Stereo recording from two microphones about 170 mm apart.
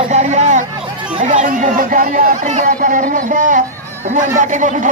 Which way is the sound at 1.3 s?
45° right (ahead or behind).